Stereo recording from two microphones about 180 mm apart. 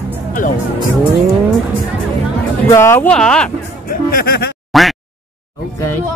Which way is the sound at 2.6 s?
15° left (ahead or behind).